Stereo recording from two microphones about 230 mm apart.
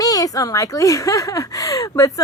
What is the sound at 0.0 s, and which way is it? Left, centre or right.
Speech, centre.